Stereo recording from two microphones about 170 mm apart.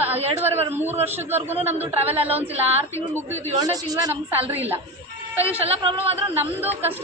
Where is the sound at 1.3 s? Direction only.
40° right (ahead or behind).